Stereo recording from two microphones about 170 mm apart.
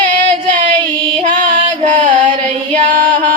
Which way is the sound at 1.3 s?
50° right (ahead or behind).